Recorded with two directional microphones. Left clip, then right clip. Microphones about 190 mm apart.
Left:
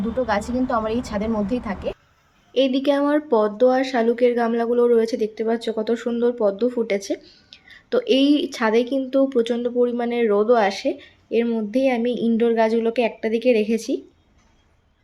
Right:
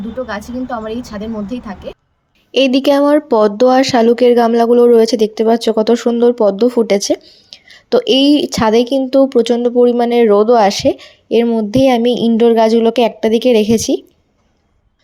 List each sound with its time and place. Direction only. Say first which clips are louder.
0.3 s a woman's voice: even; centre (ahead or behind)
2.5 s a woman's voice: right 8 dB; 45° right (ahead or behind)
7.2 s a woman's voice: right 8 dB; 25° right (ahead or behind); by 14.0 s 40° right (ahead or behind)